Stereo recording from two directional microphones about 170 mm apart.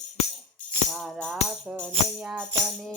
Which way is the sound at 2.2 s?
10° right (ahead or behind).